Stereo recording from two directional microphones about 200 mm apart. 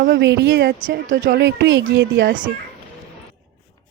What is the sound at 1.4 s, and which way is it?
Speech, 60° right (ahead or behind).